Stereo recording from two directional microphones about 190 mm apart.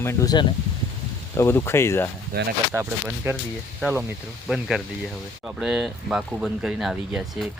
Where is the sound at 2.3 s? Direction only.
55° right (ahead or behind).